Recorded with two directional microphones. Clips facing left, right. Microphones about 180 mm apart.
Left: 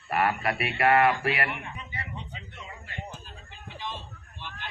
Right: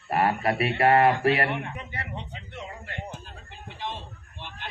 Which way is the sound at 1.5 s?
60° right (ahead or behind).